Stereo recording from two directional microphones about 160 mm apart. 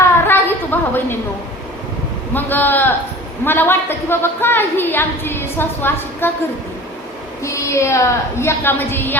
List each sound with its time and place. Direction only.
0.0 s a sound: 15° left (ahead or behind)
2.3 s a woman's voice: 10° left (ahead or behind)
7.4 s a woman's voice: 20° left (ahead or behind)